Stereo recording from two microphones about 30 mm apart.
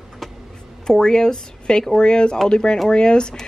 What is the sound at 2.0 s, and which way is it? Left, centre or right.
Speech, left.